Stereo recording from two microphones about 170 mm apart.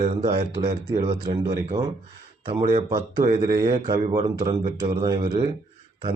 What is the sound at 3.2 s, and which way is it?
Speech, 55° right (ahead or behind).